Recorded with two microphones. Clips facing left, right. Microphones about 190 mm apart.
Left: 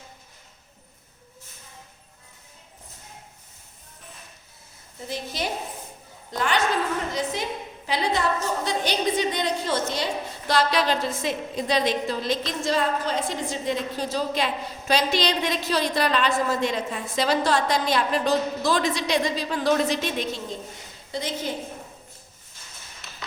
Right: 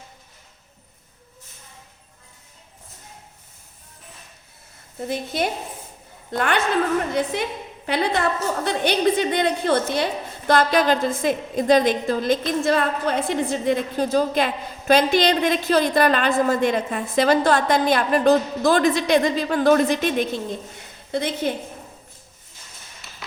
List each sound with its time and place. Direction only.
4.9 s a woman's voice: 55° right (ahead or behind)